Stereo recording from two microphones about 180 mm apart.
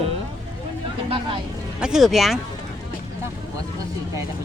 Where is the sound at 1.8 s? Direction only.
Centre (ahead or behind).